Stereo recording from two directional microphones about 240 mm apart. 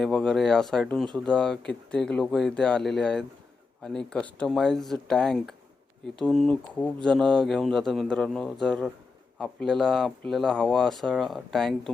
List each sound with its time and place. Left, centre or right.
0.0 s speech: centre